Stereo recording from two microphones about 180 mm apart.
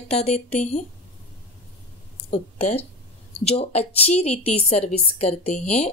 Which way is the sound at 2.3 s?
40° left (ahead or behind).